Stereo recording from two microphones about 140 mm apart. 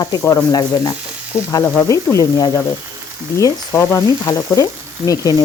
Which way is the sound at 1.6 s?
5° left (ahead or behind).